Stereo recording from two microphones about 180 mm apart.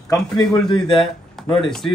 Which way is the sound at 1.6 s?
5° left (ahead or behind).